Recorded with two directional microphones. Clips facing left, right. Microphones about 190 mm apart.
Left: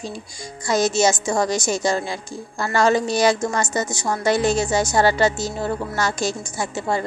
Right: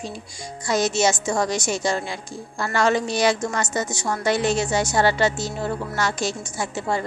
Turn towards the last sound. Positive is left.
turn(degrees=40)  # may be behind; listen again after turning